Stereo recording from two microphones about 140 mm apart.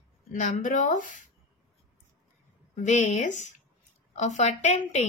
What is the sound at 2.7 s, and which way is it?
Speech, 60° left (ahead or behind).